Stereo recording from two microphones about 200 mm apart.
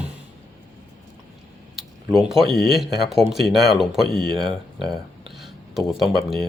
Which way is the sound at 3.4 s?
Centre (ahead or behind).